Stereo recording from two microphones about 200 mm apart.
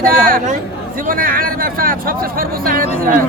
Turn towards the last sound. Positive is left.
turn(degrees=-45)  # may be behind; listen again after turning